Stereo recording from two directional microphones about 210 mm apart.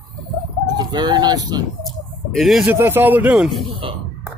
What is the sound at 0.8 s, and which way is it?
Speech, 20° right (ahead or behind).